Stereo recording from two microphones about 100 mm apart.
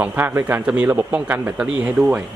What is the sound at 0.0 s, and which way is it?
Speech, 15° right (ahead or behind).